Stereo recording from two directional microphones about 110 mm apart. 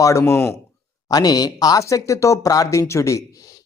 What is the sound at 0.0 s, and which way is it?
A man's voice, 30° left (ahead or behind).